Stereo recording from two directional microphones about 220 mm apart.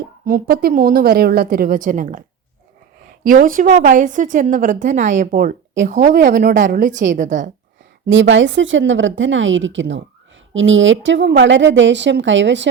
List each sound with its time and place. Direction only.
0.3 s a woman's voice: 40° right (ahead or behind)
3.2 s a woman's voice: 40° right (ahead or behind)
8.1 s a woman's voice: 55° right (ahead or behind)